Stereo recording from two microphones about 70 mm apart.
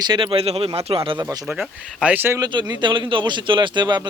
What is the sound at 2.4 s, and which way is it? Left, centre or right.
Speech, right.